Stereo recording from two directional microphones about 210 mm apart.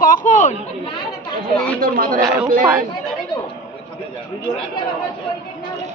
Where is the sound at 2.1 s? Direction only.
15° right (ahead or behind).